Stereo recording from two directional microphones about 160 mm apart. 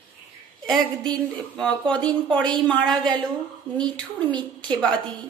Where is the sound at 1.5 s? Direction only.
5° left (ahead or behind).